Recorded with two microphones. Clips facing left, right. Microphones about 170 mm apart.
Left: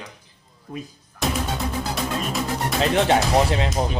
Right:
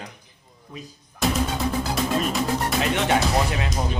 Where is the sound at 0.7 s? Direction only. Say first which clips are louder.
Left 6 dB; 55° left (ahead or behind).